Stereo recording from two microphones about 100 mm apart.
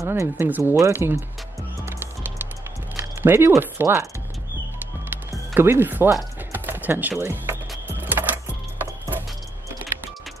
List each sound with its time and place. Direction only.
0.0 s speech: 25° right (ahead or behind)
1.9 s music: 20° right (ahead or behind)
3.0 s speech: 25° right (ahead or behind)
5.5 s speech: 25° right (ahead or behind)
6.5 s typing: 20° right (ahead or behind)
8.0 s music: 20° right (ahead or behind)